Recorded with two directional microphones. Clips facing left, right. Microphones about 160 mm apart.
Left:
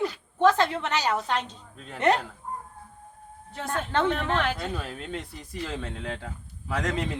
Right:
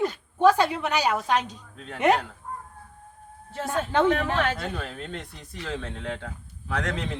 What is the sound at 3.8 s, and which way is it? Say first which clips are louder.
Speech: right 4 dB; 5° right (ahead or behind).